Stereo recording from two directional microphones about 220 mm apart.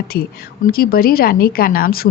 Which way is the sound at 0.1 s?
45° left (ahead or behind).